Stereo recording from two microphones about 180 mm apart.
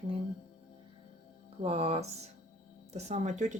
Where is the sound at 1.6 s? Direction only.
35° right (ahead or behind).